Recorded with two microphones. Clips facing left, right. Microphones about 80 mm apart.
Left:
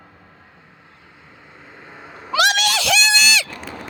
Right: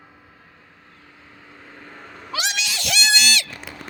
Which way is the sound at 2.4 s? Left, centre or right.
Left.